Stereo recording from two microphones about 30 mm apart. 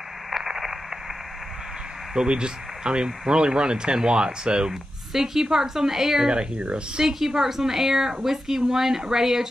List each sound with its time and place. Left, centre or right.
0.3 s radio: centre
2.2 s speech: right
5.1 s a woman's voice: centre
6.2 s speech: right
7.0 s a woman's voice: centre